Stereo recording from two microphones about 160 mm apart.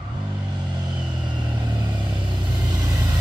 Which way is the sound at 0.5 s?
30° right (ahead or behind).